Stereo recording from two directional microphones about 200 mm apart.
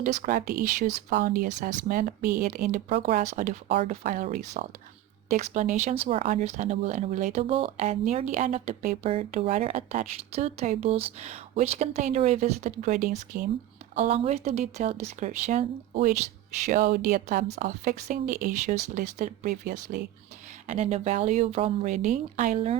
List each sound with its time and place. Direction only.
0.0 s speech: 45° right (ahead or behind)
2.9 s speech: 35° right (ahead or behind)
4.0 s speech: 40° right (ahead or behind)
13.9 s speech: 30° right (ahead or behind)
20.7 s speech: 30° right (ahead or behind)